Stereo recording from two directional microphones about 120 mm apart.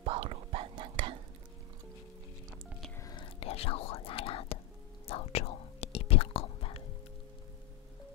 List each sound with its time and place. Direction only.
0.0 s whispering: 50° right (ahead or behind)
3.0 s whispering: 30° left (ahead or behind)
3.3 s whispering: 55° left (ahead or behind)